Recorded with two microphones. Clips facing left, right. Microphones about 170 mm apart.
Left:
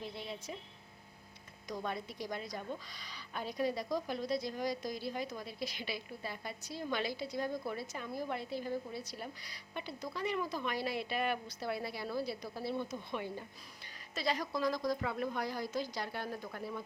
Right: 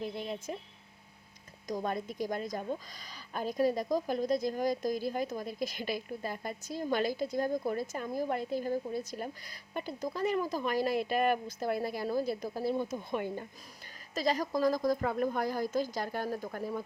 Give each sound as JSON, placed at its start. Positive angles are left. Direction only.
{"t": 0.0, "sound": "a woman's voice", "side_deg": -50}
{"t": 1.6, "sound": "a woman's voice", "side_deg": -45}